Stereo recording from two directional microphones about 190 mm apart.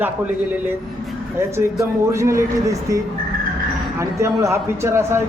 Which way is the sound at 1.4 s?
15° right (ahead or behind).